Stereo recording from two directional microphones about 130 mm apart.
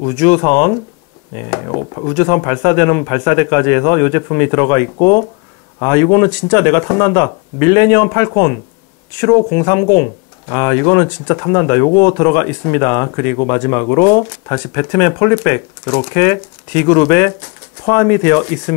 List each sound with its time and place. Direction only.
0.0 s speech: 25° left (ahead or behind)